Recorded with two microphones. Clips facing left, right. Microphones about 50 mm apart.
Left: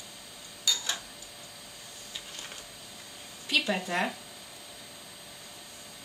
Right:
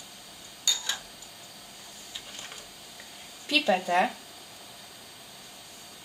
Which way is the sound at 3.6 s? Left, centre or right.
Centre.